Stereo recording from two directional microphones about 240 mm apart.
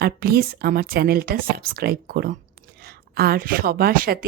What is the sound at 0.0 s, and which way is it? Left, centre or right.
A woman's voice, right.